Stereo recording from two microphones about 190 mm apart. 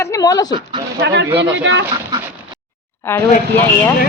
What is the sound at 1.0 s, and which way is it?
Speech, 65° right (ahead or behind).